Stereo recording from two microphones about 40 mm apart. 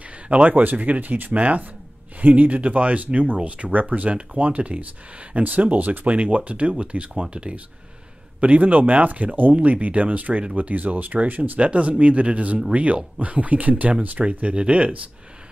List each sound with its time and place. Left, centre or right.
0.5 s speech: right
8.4 s speech: right
14.2 s speech: centre
14.5 s speech: right